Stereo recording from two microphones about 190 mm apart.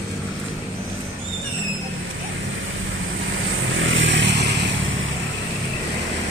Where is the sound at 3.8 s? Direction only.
85° right.